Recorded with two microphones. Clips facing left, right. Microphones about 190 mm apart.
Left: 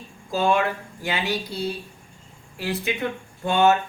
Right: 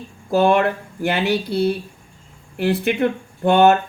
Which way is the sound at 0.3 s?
60° right (ahead or behind).